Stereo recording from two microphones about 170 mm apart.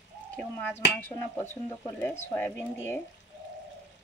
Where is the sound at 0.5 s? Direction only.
10° left (ahead or behind).